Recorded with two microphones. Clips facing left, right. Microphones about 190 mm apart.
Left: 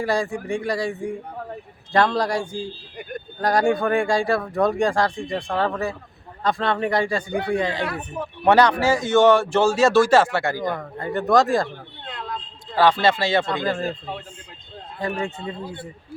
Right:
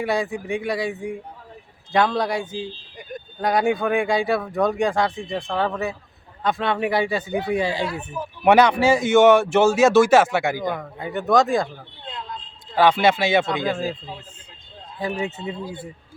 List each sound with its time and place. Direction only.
0.0 s speech: centre (ahead or behind)
8.4 s a man's voice: 20° right (ahead or behind)
10.6 s speech: centre (ahead or behind)
12.0 s a sound: 65° left (ahead or behind)
12.8 s a man's voice: 15° right (ahead or behind)
13.4 s speech: centre (ahead or behind)
15.0 s speech: 5° right (ahead or behind)